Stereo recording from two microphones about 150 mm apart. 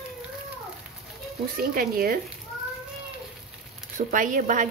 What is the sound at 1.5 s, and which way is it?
Speech, 80° right.